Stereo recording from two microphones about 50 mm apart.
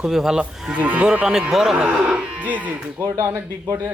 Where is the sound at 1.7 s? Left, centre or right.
Centre.